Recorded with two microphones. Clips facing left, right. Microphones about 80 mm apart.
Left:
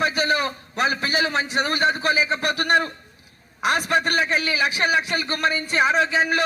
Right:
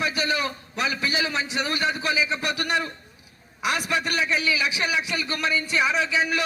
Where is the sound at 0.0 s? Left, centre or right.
Left.